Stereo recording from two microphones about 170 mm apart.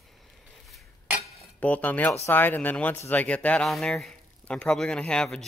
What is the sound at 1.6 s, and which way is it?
Speech, 10° left (ahead or behind).